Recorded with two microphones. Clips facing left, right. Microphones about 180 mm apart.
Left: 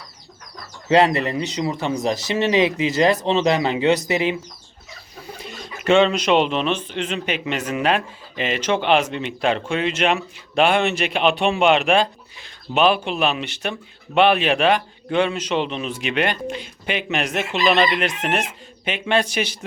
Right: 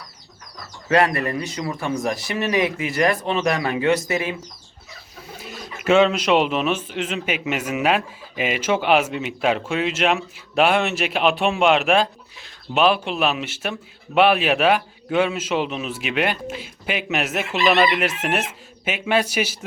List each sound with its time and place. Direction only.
0.9 s speech: 25° left (ahead or behind)
5.4 s a man's voice: 5° right (ahead or behind)